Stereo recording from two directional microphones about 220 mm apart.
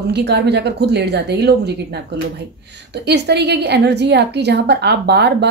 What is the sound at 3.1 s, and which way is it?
Speech, 50° right (ahead or behind).